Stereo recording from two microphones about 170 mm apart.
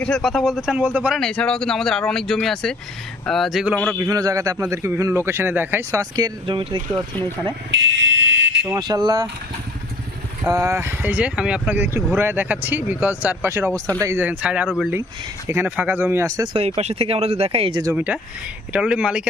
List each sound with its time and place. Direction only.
0.0 s speech: 5° left (ahead or behind)
3.9 s speech: 20° right (ahead or behind)
7.7 s fire alarm: 90° right
8.6 s speech: 20° right (ahead or behind)
10.4 s speech: 15° right (ahead or behind)
16.6 s speech: 35° right (ahead or behind)
17.9 s speech: 10° right (ahead or behind)